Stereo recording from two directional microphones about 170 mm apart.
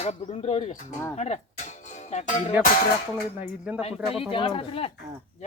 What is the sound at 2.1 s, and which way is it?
Speech, 40° left (ahead or behind).